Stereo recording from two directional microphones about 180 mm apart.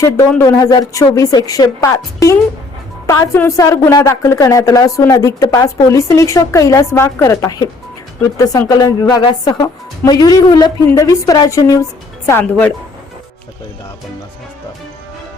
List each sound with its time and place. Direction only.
0.3 s a woman's voice: 15° left (ahead or behind)
3.1 s a woman's voice: 15° left (ahead or behind)